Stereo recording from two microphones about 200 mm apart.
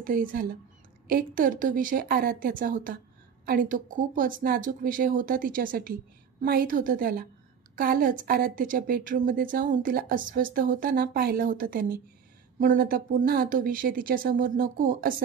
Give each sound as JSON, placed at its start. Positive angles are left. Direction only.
{"t": 0.0, "sound": "speech", "side_deg": -45}